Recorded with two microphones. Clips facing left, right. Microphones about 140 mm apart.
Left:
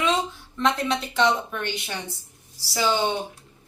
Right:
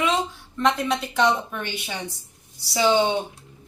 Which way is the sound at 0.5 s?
Centre (ahead or behind).